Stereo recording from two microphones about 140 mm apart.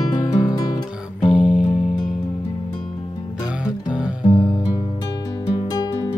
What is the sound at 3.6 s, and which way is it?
Music, 5° right (ahead or behind).